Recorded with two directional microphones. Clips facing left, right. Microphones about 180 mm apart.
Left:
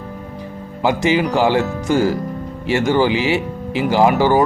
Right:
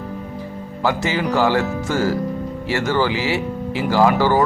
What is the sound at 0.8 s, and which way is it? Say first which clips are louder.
Speech: left 4 dB; 15° left (ahead or behind).